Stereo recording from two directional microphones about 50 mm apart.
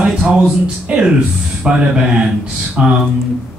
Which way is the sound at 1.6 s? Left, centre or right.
Centre.